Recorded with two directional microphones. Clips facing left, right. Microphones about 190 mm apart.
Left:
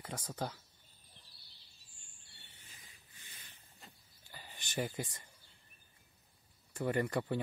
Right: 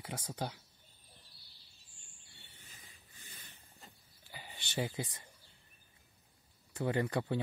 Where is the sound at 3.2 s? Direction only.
45° right (ahead or behind).